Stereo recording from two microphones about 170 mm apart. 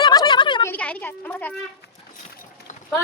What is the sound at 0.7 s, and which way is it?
Speech, 10° left (ahead or behind).